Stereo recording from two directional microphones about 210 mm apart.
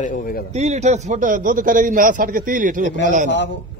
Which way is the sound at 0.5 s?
30° right (ahead or behind).